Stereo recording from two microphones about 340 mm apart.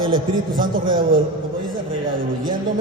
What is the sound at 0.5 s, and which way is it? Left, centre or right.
Speech, right.